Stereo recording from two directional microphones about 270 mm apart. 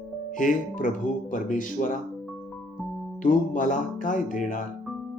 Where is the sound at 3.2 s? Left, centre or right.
Left.